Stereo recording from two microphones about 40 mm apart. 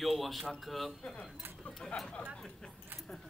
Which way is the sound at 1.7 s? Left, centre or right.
Centre.